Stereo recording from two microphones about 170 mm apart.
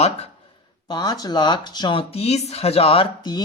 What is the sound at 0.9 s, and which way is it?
Speech, 25° left (ahead or behind).